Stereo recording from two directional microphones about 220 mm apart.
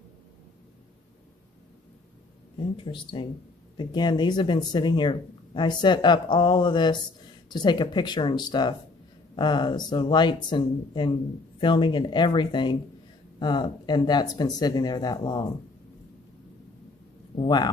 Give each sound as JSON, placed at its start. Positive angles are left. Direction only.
{"t": 2.8, "sound": "speech", "side_deg": 20}
{"t": 17.4, "sound": "speech", "side_deg": 20}